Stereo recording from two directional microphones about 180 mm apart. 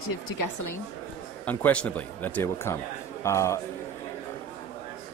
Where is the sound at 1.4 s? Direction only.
10° left (ahead or behind).